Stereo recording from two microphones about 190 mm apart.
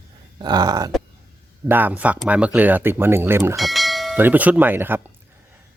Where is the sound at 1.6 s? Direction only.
10° right (ahead or behind).